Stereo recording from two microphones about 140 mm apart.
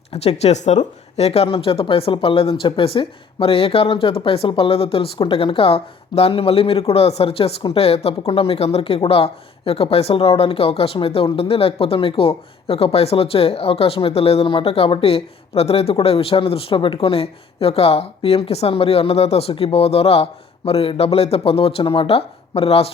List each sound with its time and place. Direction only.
0.1 s speech: 50° left (ahead or behind)